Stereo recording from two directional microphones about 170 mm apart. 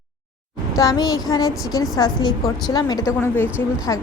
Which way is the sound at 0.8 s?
20° left (ahead or behind).